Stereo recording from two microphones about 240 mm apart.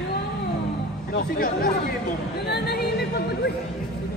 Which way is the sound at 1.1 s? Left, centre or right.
Left.